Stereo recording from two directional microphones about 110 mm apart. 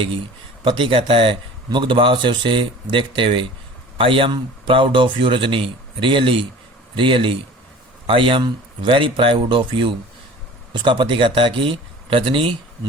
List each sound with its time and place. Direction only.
0.6 s speech: 50° right (ahead or behind)